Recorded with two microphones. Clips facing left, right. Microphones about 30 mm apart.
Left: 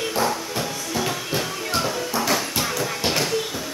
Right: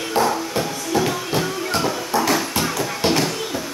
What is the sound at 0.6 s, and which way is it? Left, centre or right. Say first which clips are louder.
Music: right 5 dB; centre.